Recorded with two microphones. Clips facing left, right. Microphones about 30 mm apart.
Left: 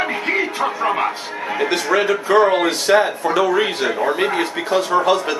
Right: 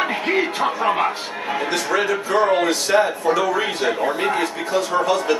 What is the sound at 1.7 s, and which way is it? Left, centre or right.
Speech, left.